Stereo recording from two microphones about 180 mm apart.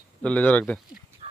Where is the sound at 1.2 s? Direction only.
35° right (ahead or behind).